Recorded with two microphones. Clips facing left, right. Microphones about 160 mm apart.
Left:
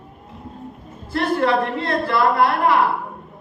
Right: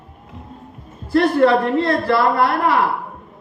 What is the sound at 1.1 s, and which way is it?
Speech, 40° right (ahead or behind).